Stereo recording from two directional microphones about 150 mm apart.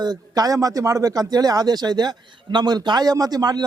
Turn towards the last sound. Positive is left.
turn(degrees=-25)  # may be behind; listen again after turning